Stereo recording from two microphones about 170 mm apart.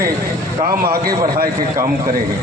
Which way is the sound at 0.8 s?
60° right (ahead or behind).